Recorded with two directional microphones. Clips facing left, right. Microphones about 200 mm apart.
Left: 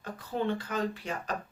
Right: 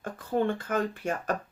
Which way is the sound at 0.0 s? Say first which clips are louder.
Right 5 dB; 50° right (ahead or behind).